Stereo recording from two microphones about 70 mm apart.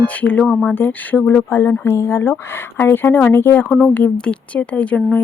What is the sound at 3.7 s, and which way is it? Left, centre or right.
Speech, centre.